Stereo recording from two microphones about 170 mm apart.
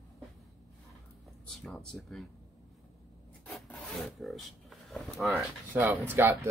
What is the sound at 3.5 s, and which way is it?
Speech, centre (ahead or behind).